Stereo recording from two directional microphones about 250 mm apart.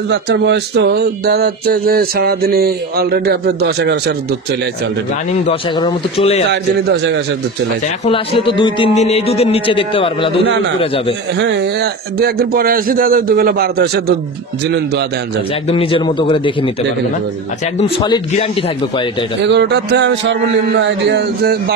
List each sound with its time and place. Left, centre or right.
0.1 s speech: right
5.3 s speech: left
6.5 s speech: right
8.0 s speech: left
11.3 s speech: right
15.7 s speech: left
17.7 s speech: left
19.4 s speech: right